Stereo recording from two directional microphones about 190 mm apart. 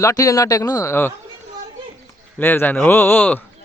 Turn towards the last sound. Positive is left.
turn(degrees=10)  # may be behind; listen again after turning